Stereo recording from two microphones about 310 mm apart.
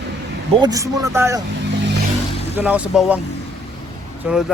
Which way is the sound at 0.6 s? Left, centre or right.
Centre.